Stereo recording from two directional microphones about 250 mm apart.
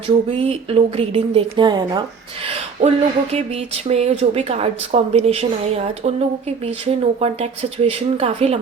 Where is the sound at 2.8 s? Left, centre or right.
Right.